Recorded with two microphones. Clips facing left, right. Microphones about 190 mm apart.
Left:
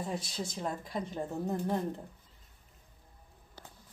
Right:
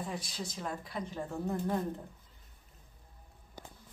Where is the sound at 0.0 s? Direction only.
25° left (ahead or behind).